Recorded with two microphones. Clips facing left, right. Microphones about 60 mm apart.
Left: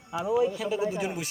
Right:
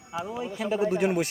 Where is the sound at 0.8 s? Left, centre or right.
Right.